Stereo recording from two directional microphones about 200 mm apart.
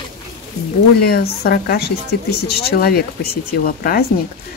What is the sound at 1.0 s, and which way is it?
Speech, 50° left (ahead or behind).